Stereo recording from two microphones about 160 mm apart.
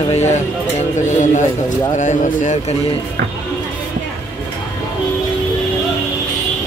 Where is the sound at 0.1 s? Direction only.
45° left (ahead or behind).